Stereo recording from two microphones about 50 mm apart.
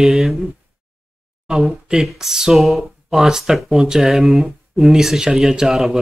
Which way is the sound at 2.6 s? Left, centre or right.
Centre.